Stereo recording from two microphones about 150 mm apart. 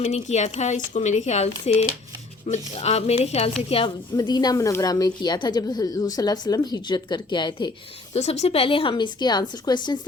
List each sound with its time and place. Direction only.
0.0 s a woman's voice: 45° left (ahead or behind); by 7.7 s 30° left (ahead or behind)
8.1 s a woman's voice: 45° left (ahead or behind); by 10.1 s 30° left (ahead or behind)